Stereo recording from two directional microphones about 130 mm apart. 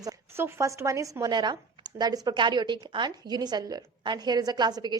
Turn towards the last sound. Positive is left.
turn(degrees=-30)  # may be behind; listen again after turning